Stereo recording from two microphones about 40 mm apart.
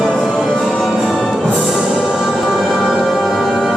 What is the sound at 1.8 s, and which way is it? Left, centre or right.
Music, centre.